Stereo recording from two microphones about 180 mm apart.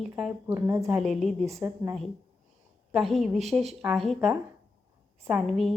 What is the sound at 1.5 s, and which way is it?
Speech, 15° right (ahead or behind).